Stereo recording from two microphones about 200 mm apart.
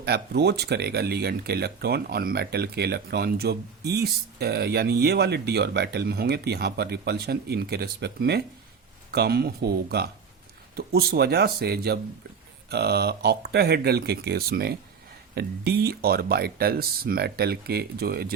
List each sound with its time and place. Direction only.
0.0 s speech: 55° right (ahead or behind)